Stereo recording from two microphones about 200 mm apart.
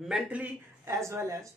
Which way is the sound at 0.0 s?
5° right (ahead or behind).